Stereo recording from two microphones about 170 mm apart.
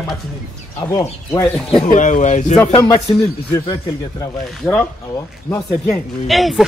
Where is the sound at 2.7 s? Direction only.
20° left (ahead or behind).